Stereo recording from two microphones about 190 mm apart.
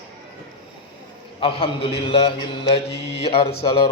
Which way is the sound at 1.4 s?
30° left (ahead or behind).